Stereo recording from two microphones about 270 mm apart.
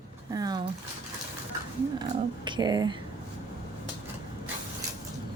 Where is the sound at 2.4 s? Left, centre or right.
Centre.